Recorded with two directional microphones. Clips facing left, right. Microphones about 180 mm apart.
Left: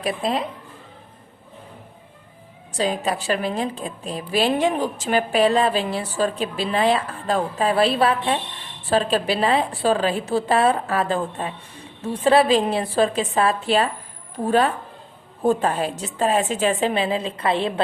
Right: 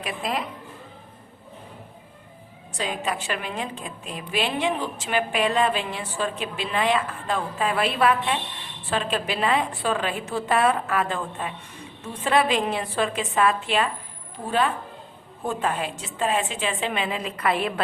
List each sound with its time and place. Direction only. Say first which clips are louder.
0.0 s speech: left 5 dB; 30° left (ahead or behind)
2.7 s a woman's voice: left 5 dB; 35° left (ahead or behind)
15.4 s a woman's voice: left 6 dB; 35° left (ahead or behind)